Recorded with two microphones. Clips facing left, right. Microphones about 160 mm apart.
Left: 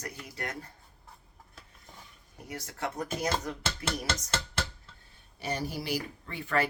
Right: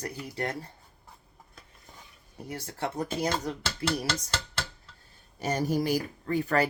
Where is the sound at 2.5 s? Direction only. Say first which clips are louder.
Right 3 dB; 30° right (ahead or behind).